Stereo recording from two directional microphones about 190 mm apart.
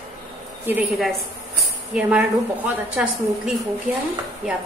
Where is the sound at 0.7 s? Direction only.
5° right (ahead or behind).